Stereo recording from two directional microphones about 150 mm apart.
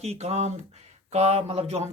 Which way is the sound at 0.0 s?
45° right (ahead or behind).